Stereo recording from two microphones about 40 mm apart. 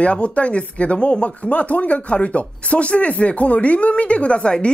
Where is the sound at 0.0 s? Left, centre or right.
Left.